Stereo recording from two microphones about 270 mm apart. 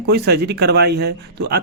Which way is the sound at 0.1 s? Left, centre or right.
Right.